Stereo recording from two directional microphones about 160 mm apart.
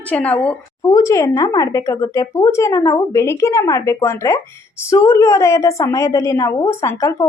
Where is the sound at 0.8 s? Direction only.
20° left (ahead or behind).